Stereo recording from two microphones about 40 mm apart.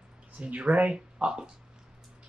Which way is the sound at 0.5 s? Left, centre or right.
Right.